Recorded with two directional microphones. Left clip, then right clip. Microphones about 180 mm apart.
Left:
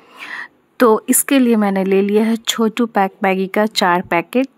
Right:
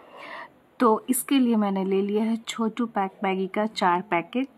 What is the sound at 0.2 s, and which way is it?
Speech, 25° left (ahead or behind).